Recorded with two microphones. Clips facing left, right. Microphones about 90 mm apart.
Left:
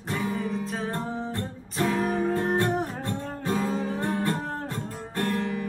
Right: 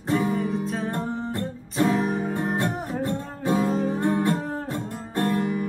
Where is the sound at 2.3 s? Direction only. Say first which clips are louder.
Left 1 dB; 15° right (ahead or behind).